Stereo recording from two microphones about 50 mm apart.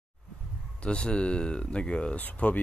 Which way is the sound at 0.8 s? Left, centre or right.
Left.